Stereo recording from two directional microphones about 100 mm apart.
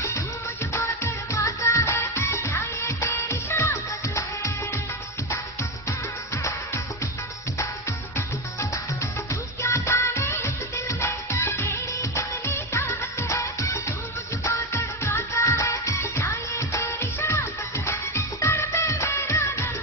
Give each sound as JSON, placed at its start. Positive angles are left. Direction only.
{"t": 0.7, "sound": "music", "side_deg": 20}
{"t": 1.3, "sound": "music", "side_deg": 30}
{"t": 9.3, "sound": "music", "side_deg": 30}